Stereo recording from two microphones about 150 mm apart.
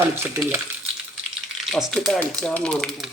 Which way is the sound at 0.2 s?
15° right (ahead or behind).